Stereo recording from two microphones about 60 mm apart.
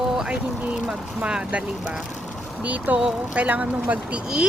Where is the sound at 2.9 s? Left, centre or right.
Centre.